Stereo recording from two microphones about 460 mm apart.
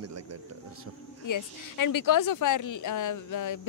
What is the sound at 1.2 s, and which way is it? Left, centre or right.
Speech, left.